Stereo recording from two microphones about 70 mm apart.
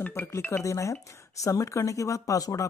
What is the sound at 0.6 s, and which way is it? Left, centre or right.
Speech, left.